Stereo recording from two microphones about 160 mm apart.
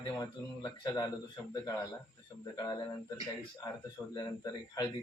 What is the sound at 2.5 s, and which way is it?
Speech, 25° left (ahead or behind).